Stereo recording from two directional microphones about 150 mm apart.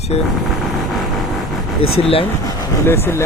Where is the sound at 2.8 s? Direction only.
15° left (ahead or behind).